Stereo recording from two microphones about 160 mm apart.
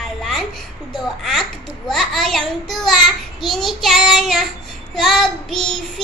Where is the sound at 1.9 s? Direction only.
Centre (ahead or behind).